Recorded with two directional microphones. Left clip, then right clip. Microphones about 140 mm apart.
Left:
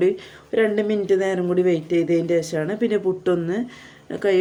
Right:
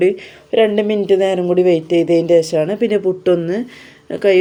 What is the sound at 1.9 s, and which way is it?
Speech, 50° left (ahead or behind).